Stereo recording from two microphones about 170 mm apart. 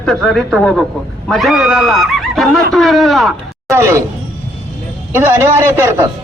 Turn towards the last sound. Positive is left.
turn(degrees=-15)  # may be behind; listen again after turning